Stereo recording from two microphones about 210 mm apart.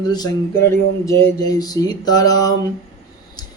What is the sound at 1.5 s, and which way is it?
Speech, 15° left (ahead or behind).